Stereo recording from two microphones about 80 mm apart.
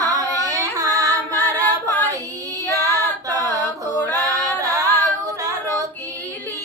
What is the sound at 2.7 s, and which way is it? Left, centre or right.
Female singing, right.